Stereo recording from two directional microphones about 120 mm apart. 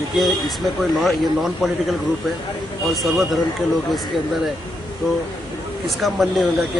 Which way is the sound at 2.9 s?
Centre (ahead or behind).